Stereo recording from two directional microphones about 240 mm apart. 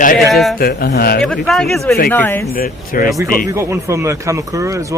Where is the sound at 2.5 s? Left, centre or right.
Left.